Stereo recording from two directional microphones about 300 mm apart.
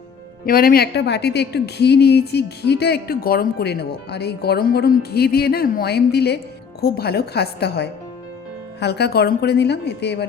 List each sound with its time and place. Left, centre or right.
0.4 s a woman's voice: left